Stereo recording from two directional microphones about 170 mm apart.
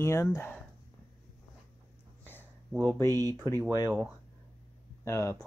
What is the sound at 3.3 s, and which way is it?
Speech, 15° left (ahead or behind).